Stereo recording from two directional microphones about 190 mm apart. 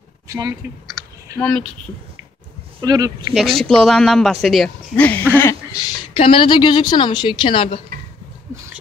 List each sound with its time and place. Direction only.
0.3 s speech: 15° right (ahead or behind)
1.4 s speech: 5° left (ahead or behind)
2.8 s speech: 20° right (ahead or behind)
3.3 s speech: centre (ahead or behind); by 7.8 s 30° left (ahead or behind)